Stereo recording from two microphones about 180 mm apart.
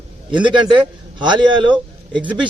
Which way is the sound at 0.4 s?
25° right (ahead or behind).